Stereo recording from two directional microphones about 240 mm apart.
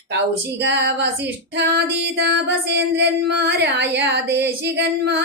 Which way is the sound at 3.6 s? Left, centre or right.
Right.